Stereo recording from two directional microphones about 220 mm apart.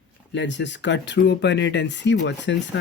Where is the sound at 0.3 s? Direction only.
55° left (ahead or behind).